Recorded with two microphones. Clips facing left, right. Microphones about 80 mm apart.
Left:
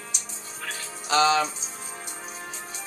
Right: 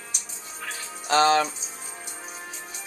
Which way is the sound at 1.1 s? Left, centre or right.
Right.